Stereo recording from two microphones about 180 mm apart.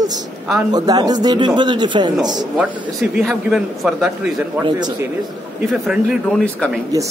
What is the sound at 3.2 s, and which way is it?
A man's voice, centre (ahead or behind).